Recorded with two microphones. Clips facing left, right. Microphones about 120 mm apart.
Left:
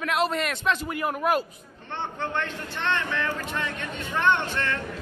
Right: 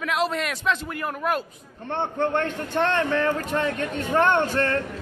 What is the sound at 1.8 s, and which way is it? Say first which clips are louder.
Speech: right 7 dB; 50° right (ahead or behind).